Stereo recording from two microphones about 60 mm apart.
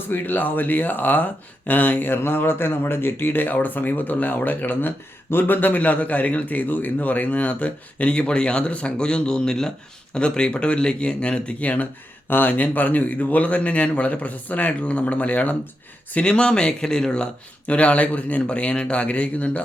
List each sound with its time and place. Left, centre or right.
0.1 s speech: left
16.1 s speech: centre